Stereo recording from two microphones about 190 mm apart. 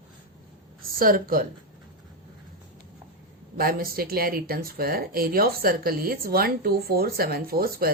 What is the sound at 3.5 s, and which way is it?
Speech, 50° right (ahead or behind).